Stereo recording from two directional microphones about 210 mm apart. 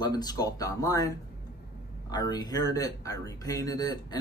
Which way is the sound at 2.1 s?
20° left (ahead or behind).